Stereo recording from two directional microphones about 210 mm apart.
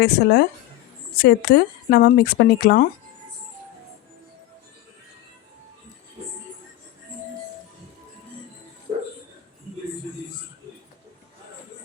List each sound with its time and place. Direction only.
0.0 s speech: 50° left (ahead or behind)